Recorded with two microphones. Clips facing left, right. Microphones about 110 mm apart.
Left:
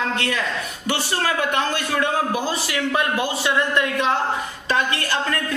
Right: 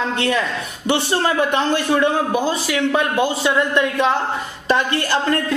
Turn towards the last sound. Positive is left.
turn(degrees=-20)  # may be behind; listen again after turning